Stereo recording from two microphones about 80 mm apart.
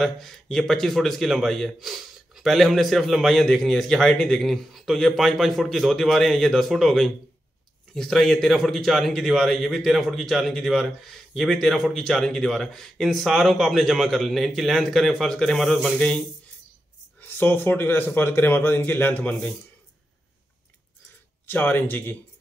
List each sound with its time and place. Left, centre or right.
0.0 s a man's voice: centre
17.2 s a man's voice: left
21.5 s a man's voice: left